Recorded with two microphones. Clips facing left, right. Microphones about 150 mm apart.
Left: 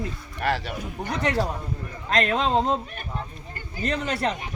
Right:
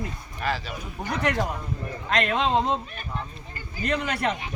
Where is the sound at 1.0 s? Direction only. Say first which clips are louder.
Left 1 dB; 35° left (ahead or behind).